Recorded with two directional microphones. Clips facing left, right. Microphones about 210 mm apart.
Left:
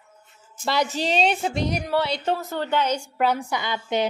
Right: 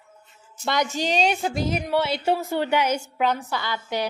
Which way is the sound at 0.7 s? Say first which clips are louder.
Left 1 dB; centre (ahead or behind).